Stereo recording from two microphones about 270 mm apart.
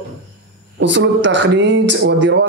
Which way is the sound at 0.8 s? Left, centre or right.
Right.